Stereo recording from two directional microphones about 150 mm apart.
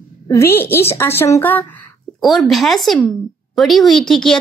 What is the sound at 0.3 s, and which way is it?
A woman's voice, 15° left (ahead or behind).